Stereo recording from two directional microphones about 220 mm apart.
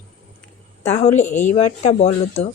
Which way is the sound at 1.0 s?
30° left (ahead or behind).